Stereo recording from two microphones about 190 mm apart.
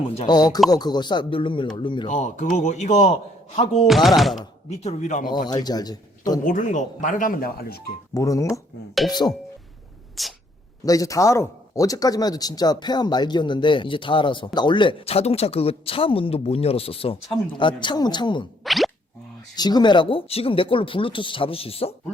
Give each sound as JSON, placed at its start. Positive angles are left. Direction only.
{"t": 0.3, "sound": "speech", "side_deg": 20}
{"t": 2.0, "sound": "a man's voice", "side_deg": 40}
{"t": 3.8, "sound": "speech", "side_deg": 0}
{"t": 4.7, "sound": "a man's voice", "side_deg": 35}
{"t": 5.5, "sound": "speech", "side_deg": 20}
{"t": 6.4, "sound": "speech", "side_deg": 45}
{"t": 8.1, "sound": "speech", "side_deg": 15}
{"t": 10.2, "sound": "speech", "side_deg": 0}
{"t": 10.8, "sound": "speech", "side_deg": 20}
{"t": 18.6, "sound": "plop", "side_deg": 0}
{"t": 19.5, "sound": "speech", "side_deg": 20}